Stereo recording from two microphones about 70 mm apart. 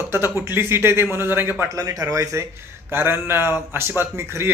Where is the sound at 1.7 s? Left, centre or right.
Right.